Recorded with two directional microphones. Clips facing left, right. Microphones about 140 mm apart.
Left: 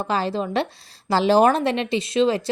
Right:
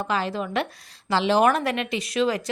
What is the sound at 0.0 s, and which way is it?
A woman's voice, 30° left (ahead or behind).